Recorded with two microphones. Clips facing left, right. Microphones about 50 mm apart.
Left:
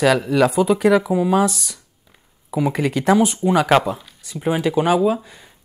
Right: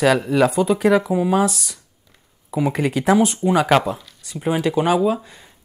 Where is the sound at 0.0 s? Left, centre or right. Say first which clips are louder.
Even; centre.